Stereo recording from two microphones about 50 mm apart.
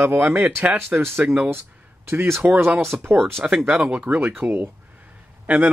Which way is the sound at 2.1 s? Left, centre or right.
Right.